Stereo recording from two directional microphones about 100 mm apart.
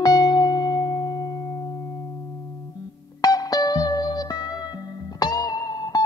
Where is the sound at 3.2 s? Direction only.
40° left (ahead or behind).